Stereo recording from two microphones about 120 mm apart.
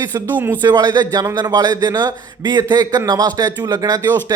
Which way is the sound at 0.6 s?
35° right (ahead or behind).